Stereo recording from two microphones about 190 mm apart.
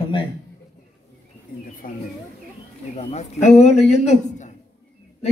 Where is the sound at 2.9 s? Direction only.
35° left (ahead or behind).